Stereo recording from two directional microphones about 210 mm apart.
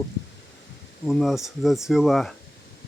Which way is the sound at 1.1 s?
Centre (ahead or behind).